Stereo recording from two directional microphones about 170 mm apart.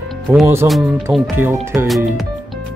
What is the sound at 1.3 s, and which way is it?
Speech, 10° right (ahead or behind).